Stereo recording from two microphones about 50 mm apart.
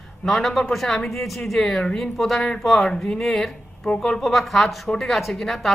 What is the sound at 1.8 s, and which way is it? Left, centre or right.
Speech, centre.